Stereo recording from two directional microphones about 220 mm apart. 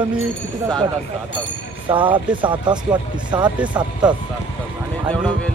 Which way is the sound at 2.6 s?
20° right (ahead or behind).